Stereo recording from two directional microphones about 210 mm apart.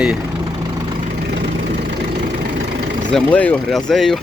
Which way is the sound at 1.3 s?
55° right (ahead or behind).